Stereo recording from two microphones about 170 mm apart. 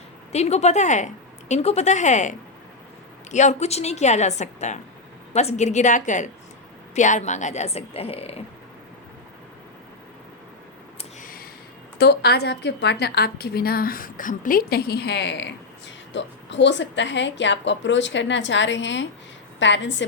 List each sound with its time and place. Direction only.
0.3 s speech: 40° left (ahead or behind)
3.3 s a woman's voice: 40° left (ahead or behind)
11.2 s a sound: 55° left (ahead or behind)
11.9 s a woman's voice: 70° left (ahead or behind); by 20.1 s 90° left